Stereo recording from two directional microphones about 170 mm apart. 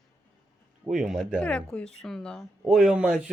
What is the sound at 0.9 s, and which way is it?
Speech, centre (ahead or behind).